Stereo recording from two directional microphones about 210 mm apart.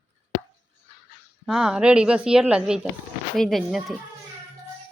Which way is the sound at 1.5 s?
5° right (ahead or behind).